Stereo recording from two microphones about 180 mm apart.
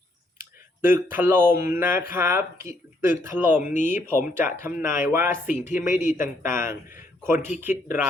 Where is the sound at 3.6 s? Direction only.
45° left (ahead or behind).